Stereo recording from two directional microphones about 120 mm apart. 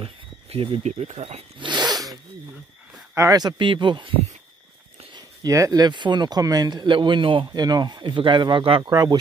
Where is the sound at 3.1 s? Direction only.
30° right (ahead or behind).